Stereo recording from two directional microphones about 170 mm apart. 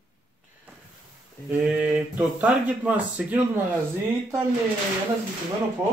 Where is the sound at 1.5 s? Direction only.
Centre (ahead or behind).